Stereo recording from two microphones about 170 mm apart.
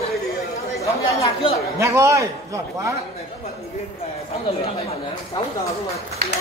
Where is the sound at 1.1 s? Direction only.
35° left (ahead or behind).